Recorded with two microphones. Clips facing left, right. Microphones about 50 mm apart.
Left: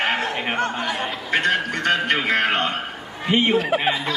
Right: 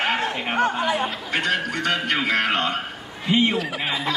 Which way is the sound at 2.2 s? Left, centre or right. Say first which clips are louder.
Left 1 dB; centre.